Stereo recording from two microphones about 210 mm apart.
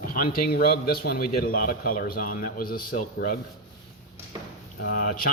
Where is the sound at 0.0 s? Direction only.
45° left (ahead or behind).